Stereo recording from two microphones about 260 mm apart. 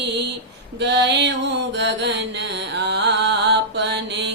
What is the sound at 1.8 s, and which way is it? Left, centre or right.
Mantra, right.